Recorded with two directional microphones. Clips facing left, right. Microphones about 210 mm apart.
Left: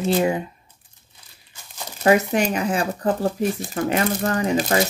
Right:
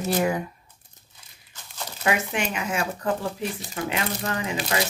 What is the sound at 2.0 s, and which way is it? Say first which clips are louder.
Speech: left 8 dB; 40° left (ahead or behind).